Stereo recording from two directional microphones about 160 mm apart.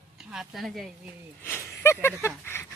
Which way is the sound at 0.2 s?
Centre (ahead or behind).